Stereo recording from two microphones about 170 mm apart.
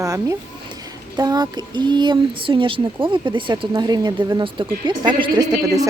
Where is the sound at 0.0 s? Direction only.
20° right (ahead or behind).